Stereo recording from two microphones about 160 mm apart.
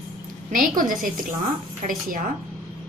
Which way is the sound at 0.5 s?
60° right (ahead or behind).